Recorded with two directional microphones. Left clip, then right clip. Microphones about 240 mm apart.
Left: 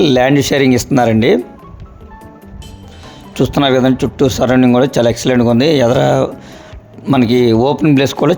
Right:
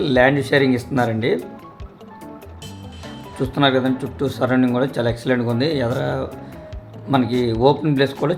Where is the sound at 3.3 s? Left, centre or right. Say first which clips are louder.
Left 6 dB; left.